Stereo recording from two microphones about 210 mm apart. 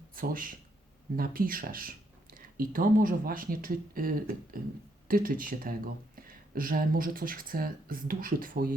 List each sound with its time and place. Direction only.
0.2 s speech: 40° right (ahead or behind)